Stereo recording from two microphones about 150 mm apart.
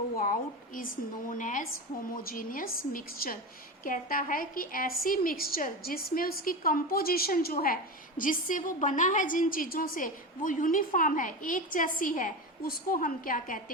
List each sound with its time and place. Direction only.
0.2 s a woman's voice: 65° left (ahead or behind)
2.1 s a woman's voice: 70° left (ahead or behind)
8.2 s a woman's voice: 65° left (ahead or behind)